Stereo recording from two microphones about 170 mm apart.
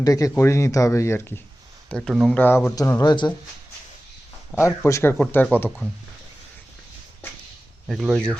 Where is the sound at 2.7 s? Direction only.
20° left (ahead or behind).